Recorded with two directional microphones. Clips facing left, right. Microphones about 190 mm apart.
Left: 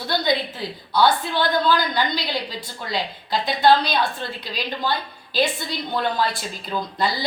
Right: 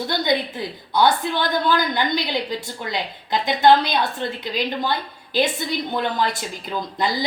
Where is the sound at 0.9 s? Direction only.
20° right (ahead or behind).